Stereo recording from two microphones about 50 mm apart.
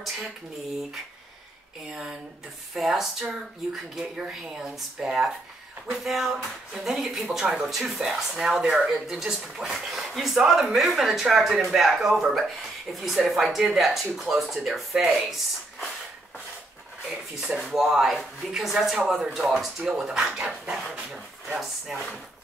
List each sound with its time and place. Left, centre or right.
1.9 s speech: centre
4.0 s speech: centre
4.5 s speech: centre
17.0 s speech: centre
20.4 s dog: centre
20.9 s speech: centre
21.9 s speech: centre